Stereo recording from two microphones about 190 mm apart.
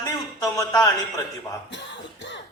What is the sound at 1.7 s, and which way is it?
Cough, 70° left (ahead or behind).